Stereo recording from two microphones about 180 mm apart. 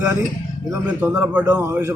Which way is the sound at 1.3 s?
5° right (ahead or behind).